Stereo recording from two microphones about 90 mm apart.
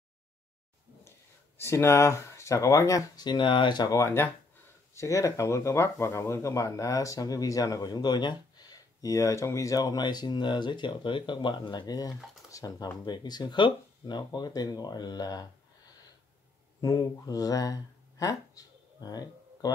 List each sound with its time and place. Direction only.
1.6 s speech: 30° left (ahead or behind)
3.2 s speech: 55° left (ahead or behind)
3.9 s speech: 30° left (ahead or behind); by 15.4 s 50° left (ahead or behind)
16.8 s speech: 40° left (ahead or behind)